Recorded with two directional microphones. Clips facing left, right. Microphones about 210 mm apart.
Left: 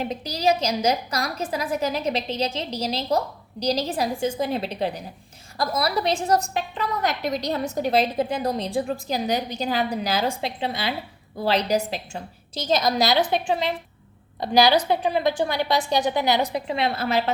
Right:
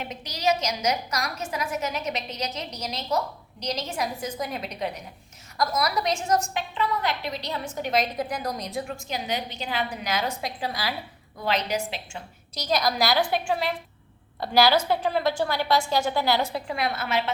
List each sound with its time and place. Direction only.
0.0 s a woman's voice: 35° left (ahead or behind)
12.6 s a woman's voice: 25° left (ahead or behind)